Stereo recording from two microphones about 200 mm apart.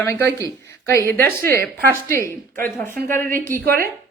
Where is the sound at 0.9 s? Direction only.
15° left (ahead or behind).